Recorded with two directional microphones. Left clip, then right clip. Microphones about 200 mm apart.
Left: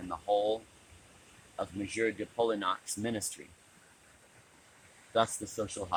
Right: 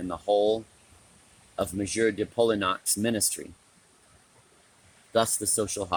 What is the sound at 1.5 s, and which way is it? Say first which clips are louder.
Speech: right 7 dB; 60° right (ahead or behind).